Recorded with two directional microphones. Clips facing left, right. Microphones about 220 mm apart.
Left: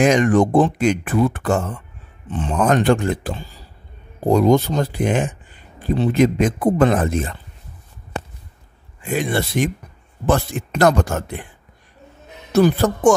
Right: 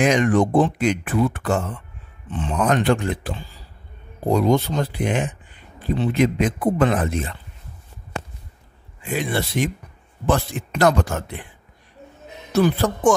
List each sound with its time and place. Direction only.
0.0 s speech: 45° left (ahead or behind)
9.0 s speech: 45° left (ahead or behind)
12.5 s speech: 45° left (ahead or behind)